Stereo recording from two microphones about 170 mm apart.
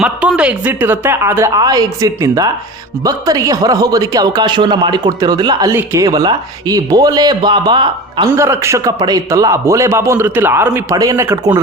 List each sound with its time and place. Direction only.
0.0 s a man's voice: 5° right (ahead or behind); by 8.3 s 25° right (ahead or behind)
8.3 s a man's voice: 15° right (ahead or behind)